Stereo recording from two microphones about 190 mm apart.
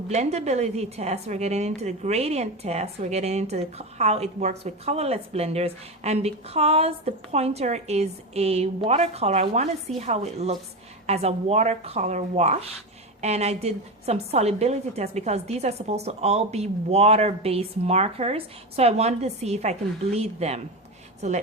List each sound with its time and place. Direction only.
0.1 s a woman's voice: 35° right (ahead or behind)